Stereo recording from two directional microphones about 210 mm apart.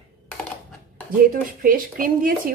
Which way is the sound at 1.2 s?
45° right (ahead or behind).